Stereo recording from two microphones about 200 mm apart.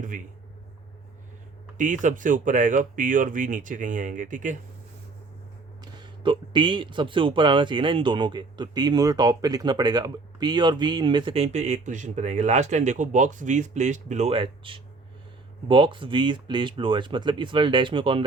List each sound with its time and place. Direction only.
1.8 s speech: 40° right (ahead or behind)
5.8 s speech: 25° right (ahead or behind)